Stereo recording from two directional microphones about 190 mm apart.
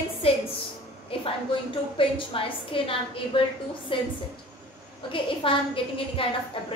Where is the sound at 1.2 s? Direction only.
25° left (ahead or behind).